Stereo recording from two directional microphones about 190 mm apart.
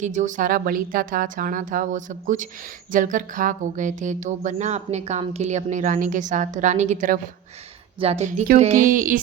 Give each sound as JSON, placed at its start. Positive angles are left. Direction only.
{"t": 0.0, "sound": "a woman's voice", "side_deg": -40}